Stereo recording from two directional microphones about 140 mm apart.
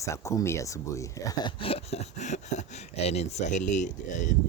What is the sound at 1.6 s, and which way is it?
Speech, 45° left (ahead or behind).